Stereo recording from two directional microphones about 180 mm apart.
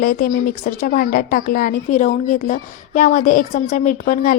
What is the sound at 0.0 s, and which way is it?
A woman's voice, 55° left (ahead or behind).